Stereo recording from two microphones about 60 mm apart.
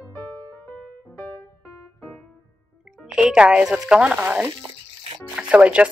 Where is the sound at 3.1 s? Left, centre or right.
Centre.